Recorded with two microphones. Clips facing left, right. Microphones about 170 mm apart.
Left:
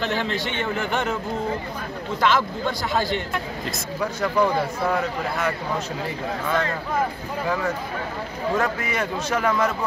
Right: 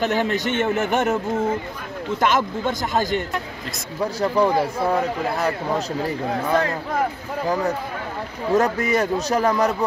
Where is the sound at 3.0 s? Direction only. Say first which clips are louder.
Right 3 dB; 45° right (ahead or behind).